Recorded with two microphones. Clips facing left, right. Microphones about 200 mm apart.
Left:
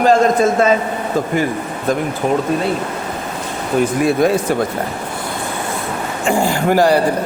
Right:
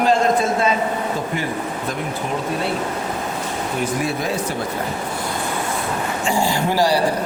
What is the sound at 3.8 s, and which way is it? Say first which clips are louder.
Speech: left 10 dB; 50° left (ahead or behind).